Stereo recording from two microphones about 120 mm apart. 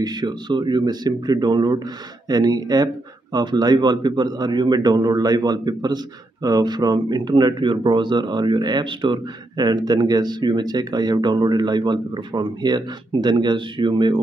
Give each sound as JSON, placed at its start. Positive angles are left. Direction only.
{"t": 0.0, "sound": "speech", "side_deg": -35}